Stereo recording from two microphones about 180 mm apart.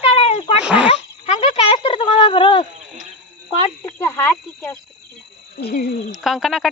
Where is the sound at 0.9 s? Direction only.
35° left (ahead or behind).